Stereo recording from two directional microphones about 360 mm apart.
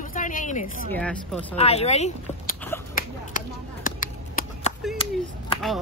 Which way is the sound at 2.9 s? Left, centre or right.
Left.